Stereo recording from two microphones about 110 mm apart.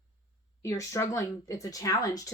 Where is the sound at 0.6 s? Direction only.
30° left (ahead or behind).